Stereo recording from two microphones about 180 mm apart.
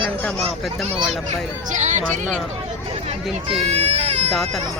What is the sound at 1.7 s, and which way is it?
Speech, 40° right (ahead or behind).